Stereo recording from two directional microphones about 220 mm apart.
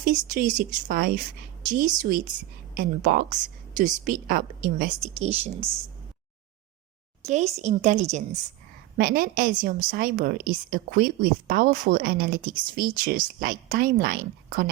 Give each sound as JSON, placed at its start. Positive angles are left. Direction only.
{"t": 0.0, "sound": "a woman's voice", "side_deg": -35}
{"t": 5.0, "sound": "speech", "side_deg": -30}
{"t": 7.3, "sound": "a woman's voice", "side_deg": -30}
{"t": 9.0, "sound": "a woman's voice", "side_deg": -40}